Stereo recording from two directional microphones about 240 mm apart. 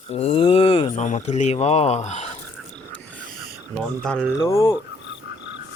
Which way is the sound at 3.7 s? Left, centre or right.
Centre.